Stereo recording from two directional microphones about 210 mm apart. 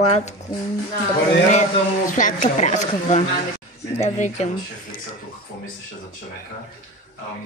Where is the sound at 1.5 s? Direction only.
35° left (ahead or behind).